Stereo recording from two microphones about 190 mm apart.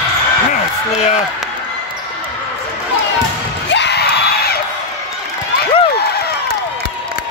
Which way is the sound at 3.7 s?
65° left (ahead or behind).